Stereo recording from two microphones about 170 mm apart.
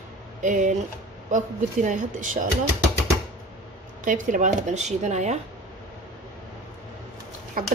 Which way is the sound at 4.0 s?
50° right (ahead or behind).